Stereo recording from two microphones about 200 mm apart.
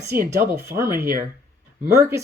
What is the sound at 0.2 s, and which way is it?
Speech, 50° right (ahead or behind).